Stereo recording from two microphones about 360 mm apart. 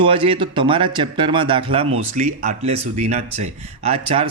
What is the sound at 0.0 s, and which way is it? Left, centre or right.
Speech, centre.